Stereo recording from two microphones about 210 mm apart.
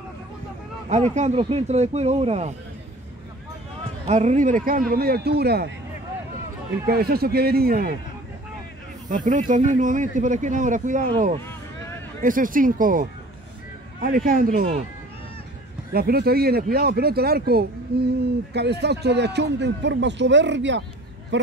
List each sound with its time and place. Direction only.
0.8 s speech: 35° right (ahead or behind)
4.1 s speech: 35° right (ahead or behind); by 5.7 s 50° right (ahead or behind)
6.9 s speech: 45° right (ahead or behind)
9.1 s speech: 40° right (ahead or behind)
11.4 s vehicle: 10° left (ahead or behind)
12.2 s speech: 40° right (ahead or behind)
15.9 s speech: 45° right (ahead or behind)